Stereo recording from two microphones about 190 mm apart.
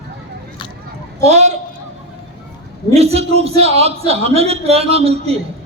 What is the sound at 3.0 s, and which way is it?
A man's voice, 35° right (ahead or behind).